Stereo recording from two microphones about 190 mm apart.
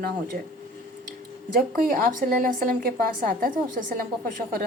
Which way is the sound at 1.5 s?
50° right (ahead or behind).